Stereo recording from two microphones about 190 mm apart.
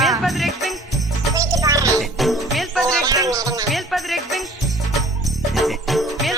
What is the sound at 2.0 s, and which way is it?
Jingle bell, centre (ahead or behind).